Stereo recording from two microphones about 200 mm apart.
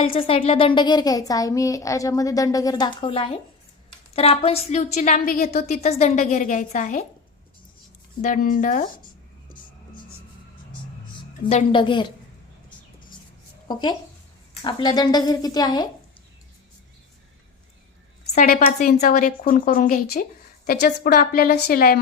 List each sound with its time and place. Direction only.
0.0 s a woman's voice: 30° left (ahead or behind); by 5.6 s 45° left (ahead or behind)
5.6 s a woman's voice: 35° left (ahead or behind)
8.2 s speech: 45° left (ahead or behind)
11.4 s speech: 30° left (ahead or behind)
14.6 s speech: 20° left (ahead or behind)
18.3 s speech: 45° left (ahead or behind)